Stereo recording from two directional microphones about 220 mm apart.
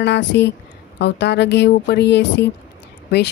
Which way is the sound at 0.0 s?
50° left (ahead or behind).